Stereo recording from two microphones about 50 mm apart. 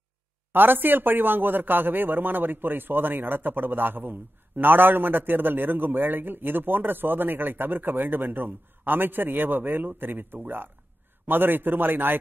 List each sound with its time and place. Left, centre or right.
0.5 s speech: right